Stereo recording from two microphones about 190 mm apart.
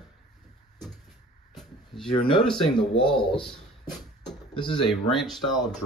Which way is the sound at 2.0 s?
25° left (ahead or behind).